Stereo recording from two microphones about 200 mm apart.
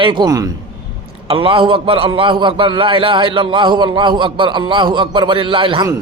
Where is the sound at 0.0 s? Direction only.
25° right (ahead or behind).